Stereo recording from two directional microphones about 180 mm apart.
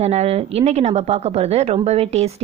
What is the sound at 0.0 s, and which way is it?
Speech, 35° right (ahead or behind).